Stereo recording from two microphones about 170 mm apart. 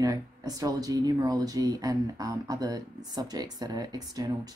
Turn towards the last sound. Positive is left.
turn(degrees=-25)  # may be behind; listen again after turning